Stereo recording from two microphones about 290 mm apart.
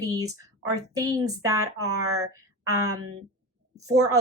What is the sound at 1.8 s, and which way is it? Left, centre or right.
Speech, right.